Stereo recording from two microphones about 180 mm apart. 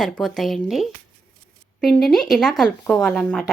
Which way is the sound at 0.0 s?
Centre (ahead or behind).